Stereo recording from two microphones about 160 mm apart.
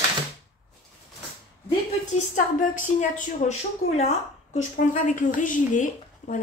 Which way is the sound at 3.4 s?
45° left (ahead or behind).